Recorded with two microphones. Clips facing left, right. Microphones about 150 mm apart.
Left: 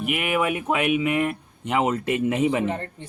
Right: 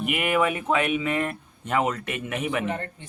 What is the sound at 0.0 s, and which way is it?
Speech, centre (ahead or behind).